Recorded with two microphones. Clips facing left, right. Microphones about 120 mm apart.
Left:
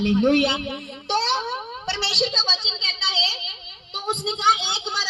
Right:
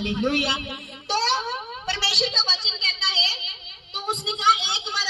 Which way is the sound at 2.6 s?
25° left (ahead or behind).